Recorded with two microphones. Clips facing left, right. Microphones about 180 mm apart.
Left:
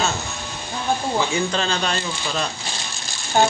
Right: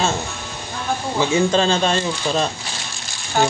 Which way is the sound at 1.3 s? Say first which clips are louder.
Right 6 dB; 25° right (ahead or behind).